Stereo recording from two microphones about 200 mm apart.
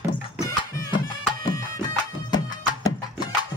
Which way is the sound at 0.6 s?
20° left (ahead or behind).